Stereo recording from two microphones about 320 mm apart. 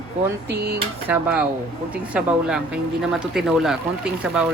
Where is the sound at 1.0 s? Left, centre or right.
Centre.